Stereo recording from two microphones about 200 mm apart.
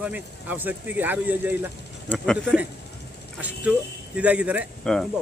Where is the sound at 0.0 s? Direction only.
10° right (ahead or behind).